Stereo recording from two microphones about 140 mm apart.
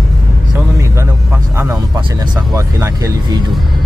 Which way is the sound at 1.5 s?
15° right (ahead or behind).